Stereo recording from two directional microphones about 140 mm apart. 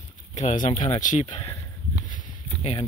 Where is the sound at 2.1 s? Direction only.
50° left (ahead or behind).